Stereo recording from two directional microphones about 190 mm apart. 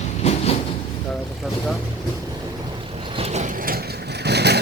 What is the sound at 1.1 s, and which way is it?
Speech, centre (ahead or behind).